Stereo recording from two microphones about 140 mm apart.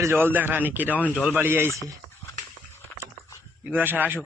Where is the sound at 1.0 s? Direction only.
10° left (ahead or behind).